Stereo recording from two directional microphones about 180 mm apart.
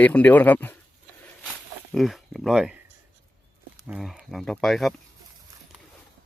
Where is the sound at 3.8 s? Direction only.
5° right (ahead or behind).